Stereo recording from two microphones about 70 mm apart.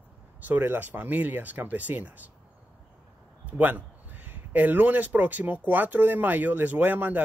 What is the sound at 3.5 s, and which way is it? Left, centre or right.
Speech, right.